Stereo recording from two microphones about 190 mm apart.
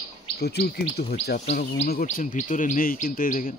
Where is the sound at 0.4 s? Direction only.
60° left (ahead or behind).